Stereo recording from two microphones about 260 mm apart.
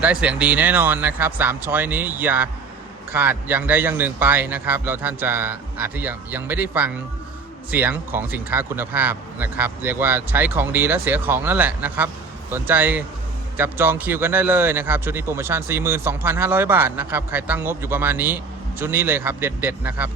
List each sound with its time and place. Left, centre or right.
0.0 s speech: centre